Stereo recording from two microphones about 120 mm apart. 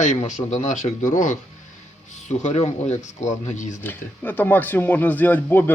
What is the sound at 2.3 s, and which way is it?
Speech, 75° left (ahead or behind).